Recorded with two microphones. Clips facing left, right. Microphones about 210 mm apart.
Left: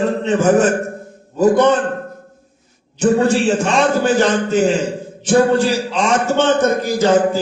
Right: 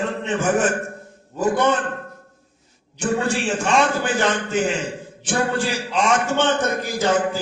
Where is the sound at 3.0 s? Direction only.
40° left (ahead or behind).